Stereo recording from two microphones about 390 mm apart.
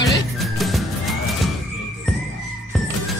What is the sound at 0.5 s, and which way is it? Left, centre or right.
Music, centre.